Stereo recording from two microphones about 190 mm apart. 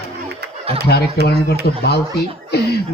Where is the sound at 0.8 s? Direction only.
55° left (ahead or behind).